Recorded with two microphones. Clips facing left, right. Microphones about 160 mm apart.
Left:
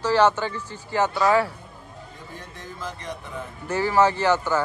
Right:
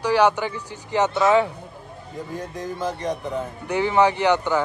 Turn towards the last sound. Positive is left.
turn(degrees=-15)  # may be behind; listen again after turning